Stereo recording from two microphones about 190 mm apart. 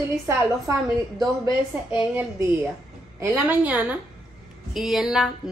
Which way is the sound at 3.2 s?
10° right (ahead or behind).